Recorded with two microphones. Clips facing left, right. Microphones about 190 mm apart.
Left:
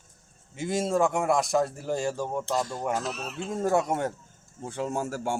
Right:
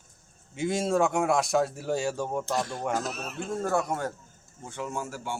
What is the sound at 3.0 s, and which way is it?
Speech, 45° right (ahead or behind).